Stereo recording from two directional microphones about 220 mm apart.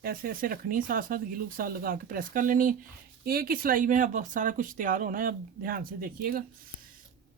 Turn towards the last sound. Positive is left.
turn(degrees=-40)  # may be behind; listen again after turning